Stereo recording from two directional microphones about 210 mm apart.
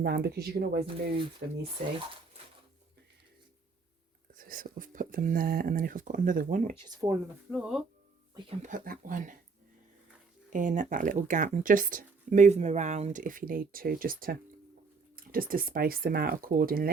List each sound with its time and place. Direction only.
0.0 s speech: 50° right (ahead or behind)
4.4 s speech: 40° right (ahead or behind)
6.8 s speech: 15° right (ahead or behind)
7.5 s speech: centre (ahead or behind)
8.4 s speech: 30° right (ahead or behind)
10.5 s speech: 35° right (ahead or behind)